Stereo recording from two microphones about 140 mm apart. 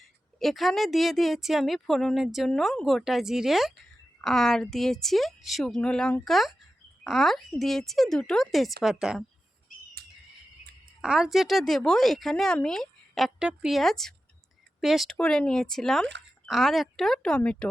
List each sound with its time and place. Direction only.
0.0 s speech: centre (ahead or behind)
10.0 s bird: 90° right
11.0 s speech: 5° right (ahead or behind)